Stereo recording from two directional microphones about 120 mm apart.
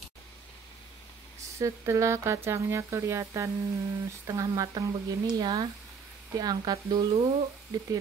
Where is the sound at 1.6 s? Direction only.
25° right (ahead or behind).